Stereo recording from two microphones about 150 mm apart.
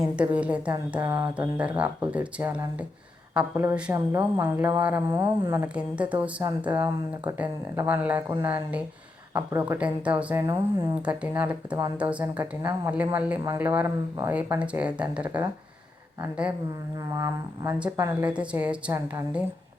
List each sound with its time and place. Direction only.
0.2 s speech: 10° right (ahead or behind)
17.2 s speech: 20° right (ahead or behind)